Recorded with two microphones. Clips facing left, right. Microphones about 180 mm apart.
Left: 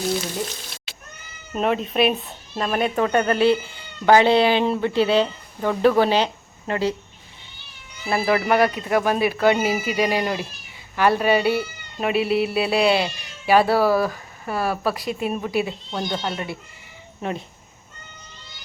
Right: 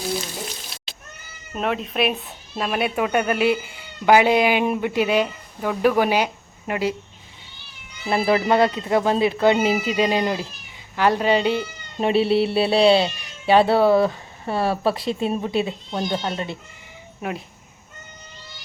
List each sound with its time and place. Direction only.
1.5 s speech: centre (ahead or behind)
8.1 s speech: 25° right (ahead or behind)
11.9 s speech: 30° right (ahead or behind)